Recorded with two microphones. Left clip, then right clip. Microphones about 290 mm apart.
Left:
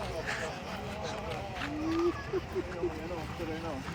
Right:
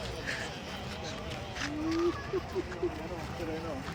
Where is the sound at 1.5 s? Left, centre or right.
Centre.